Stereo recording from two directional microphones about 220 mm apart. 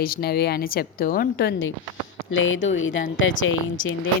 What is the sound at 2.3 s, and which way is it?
Speech, 60° left (ahead or behind).